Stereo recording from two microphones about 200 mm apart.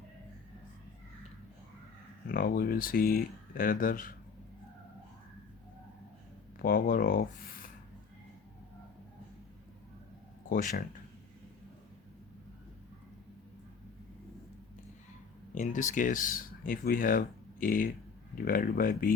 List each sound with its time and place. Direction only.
2.3 s speech: 45° left (ahead or behind)
6.6 s speech: 45° left (ahead or behind)
10.5 s speech: 45° left (ahead or behind)
15.5 s speech: 40° left (ahead or behind)